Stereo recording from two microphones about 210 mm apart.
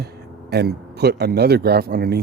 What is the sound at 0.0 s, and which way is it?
Speech, 50° right (ahead or behind).